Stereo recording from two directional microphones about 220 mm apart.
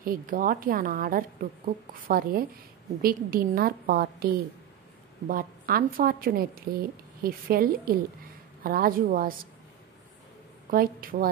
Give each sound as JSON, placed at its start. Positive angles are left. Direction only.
{"t": 0.0, "sound": "a woman's voice", "side_deg": -40}
{"t": 5.3, "sound": "a woman's voice", "side_deg": -40}
{"t": 10.7, "sound": "a woman's voice", "side_deg": -40}